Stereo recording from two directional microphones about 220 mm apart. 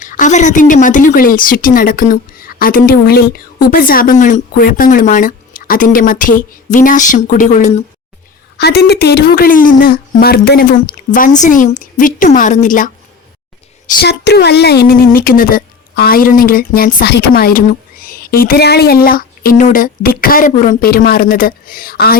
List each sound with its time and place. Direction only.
0.0 s speech: 35° left (ahead or behind)
8.5 s speech: 45° left (ahead or behind)
14.0 s speech: 50° left (ahead or behind)